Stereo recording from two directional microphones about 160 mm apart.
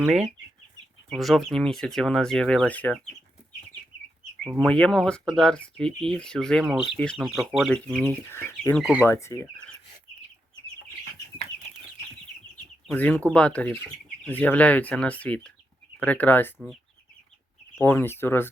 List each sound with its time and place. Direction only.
0.0 s speech: 10° right (ahead or behind); by 3.0 s 10° left (ahead or behind)
4.4 s speech: centre (ahead or behind); by 8.8 s 15° left (ahead or behind)
8.8 s speech: 10° right (ahead or behind)
9.0 s speech: 15° left (ahead or behind)
12.9 s speech: 10° left (ahead or behind)
17.7 s speech: 15° left (ahead or behind)